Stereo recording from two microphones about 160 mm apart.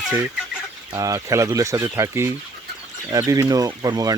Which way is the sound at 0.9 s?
20° right (ahead or behind).